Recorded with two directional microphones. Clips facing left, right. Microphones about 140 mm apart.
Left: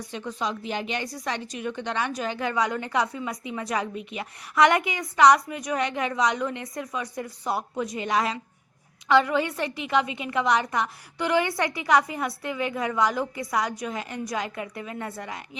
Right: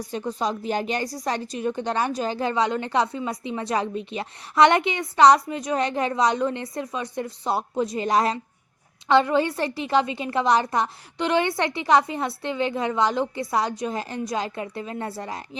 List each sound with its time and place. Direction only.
0.0 s a woman's voice: 35° right (ahead or behind)